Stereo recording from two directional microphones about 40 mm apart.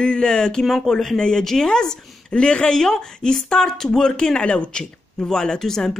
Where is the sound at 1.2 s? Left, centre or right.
Centre.